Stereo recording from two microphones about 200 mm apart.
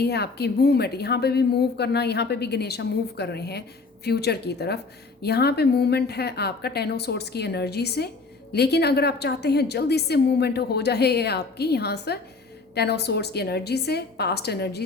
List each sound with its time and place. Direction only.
0.0 s a woman's voice: 55° left (ahead or behind)